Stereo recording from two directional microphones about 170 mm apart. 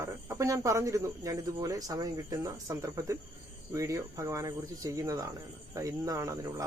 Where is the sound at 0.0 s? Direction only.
20° right (ahead or behind).